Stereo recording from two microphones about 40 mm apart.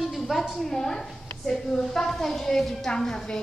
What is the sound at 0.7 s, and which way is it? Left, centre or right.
A woman's voice, centre.